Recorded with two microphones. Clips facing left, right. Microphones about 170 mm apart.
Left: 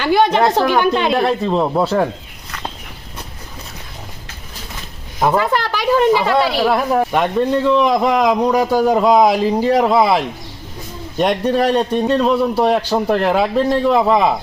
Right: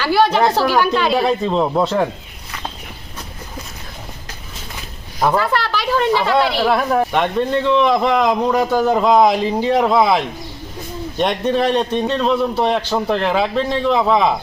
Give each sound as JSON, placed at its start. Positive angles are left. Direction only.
{"t": 0.0, "sound": "speech", "side_deg": 20}
{"t": 0.6, "sound": "speech", "side_deg": -5}
{"t": 5.3, "sound": "speech", "side_deg": 15}